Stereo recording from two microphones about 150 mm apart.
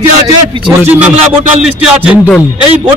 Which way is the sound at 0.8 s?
10° right (ahead or behind).